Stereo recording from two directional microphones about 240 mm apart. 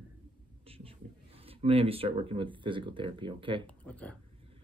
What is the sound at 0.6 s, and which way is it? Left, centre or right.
Speech, right.